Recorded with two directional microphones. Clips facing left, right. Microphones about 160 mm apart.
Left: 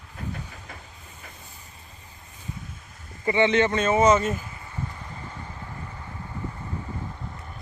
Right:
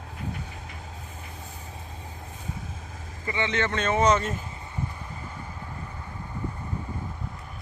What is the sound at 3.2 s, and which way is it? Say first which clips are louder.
Speech: left 7 dB; 25° left (ahead or behind).